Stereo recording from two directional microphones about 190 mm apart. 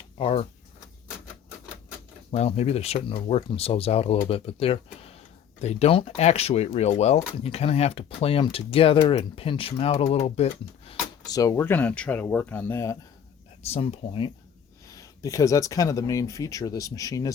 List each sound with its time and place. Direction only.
0.2 s speech: 30° left (ahead or behind)
2.3 s speech: 35° left (ahead or behind)
11.3 s speech: 20° left (ahead or behind)
13.7 s speech: 30° left (ahead or behind)
14.8 s speech: 20° left (ahead or behind)